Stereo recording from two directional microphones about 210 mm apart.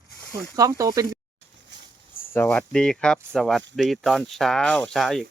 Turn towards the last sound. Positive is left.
turn(degrees=0)  # may be behind; listen again after turning